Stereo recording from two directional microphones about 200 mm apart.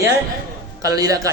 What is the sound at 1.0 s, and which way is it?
Speech, 15° right (ahead or behind).